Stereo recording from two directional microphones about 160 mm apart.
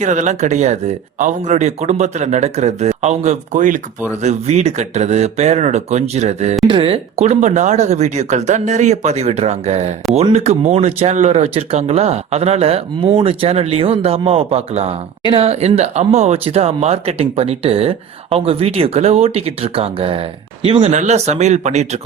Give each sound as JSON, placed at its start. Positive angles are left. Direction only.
{"t": 0.0, "sound": "speech", "side_deg": -50}
{"t": 6.7, "sound": "speech", "side_deg": -30}
{"t": 20.9, "sound": "speech", "side_deg": -45}